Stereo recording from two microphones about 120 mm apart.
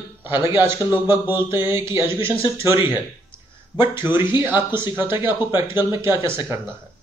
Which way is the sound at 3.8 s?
20° right (ahead or behind).